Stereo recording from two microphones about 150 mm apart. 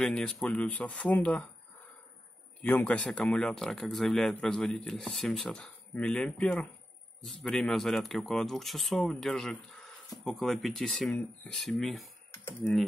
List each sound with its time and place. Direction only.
0.0 s speech: 5° left (ahead or behind)
2.6 s speech: 10° left (ahead or behind)